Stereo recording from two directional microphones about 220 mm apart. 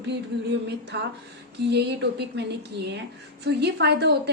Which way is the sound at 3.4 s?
50° right (ahead or behind).